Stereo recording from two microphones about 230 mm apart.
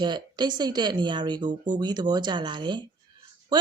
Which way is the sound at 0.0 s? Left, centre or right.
Centre.